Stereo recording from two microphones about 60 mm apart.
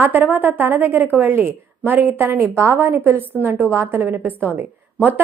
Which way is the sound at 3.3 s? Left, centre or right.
Right.